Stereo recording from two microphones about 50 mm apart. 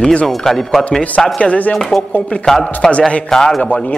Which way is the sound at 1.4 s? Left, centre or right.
Left.